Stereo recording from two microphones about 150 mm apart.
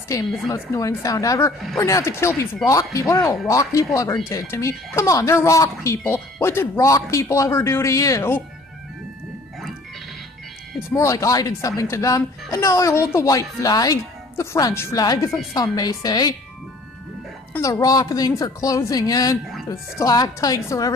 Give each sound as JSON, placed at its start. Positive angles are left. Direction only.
{"t": 0.5, "sound": "speech", "side_deg": 20}
{"t": 10.9, "sound": "speech", "side_deg": 20}
{"t": 17.6, "sound": "speech", "side_deg": 20}